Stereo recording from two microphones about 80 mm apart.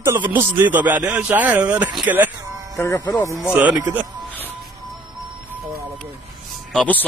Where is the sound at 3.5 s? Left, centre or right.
Centre.